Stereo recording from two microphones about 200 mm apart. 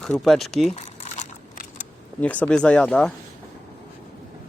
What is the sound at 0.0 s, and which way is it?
Speech, centre (ahead or behind).